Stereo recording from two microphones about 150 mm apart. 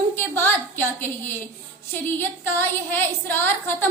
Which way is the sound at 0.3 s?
15° left (ahead or behind).